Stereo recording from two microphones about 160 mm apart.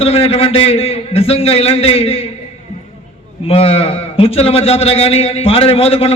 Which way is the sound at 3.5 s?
40° left (ahead or behind).